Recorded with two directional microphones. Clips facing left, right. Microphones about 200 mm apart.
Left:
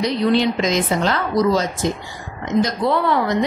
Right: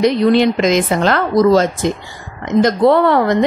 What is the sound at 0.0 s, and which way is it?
A woman's voice, 55° right (ahead or behind).